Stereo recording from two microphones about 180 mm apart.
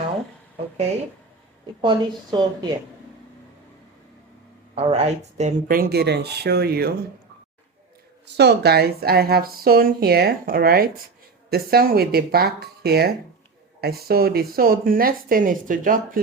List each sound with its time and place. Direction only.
1.8 s speech: 25° right (ahead or behind)
4.7 s a woman's voice: 35° right (ahead or behind); by 6.9 s 60° right (ahead or behind)
8.4 s a woman's voice: 65° right (ahead or behind); by 16.2 s 50° right (ahead or behind)